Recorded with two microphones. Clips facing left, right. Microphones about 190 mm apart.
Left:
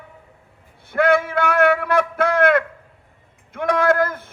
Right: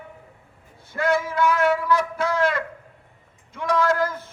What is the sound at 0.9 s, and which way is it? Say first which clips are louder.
A man's voice: left 5 dB; 60° left (ahead or behind).